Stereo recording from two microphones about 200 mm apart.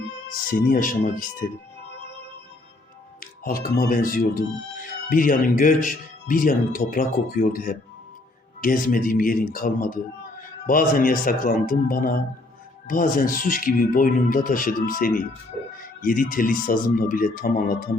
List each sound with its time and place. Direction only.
0.3 s speech: 45° left (ahead or behind)
3.4 s speech: 45° left (ahead or behind)